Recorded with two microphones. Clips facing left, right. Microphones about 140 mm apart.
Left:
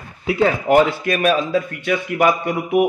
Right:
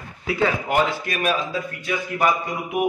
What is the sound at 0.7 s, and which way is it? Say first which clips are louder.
Speech: left 7 dB; 50° left (ahead or behind).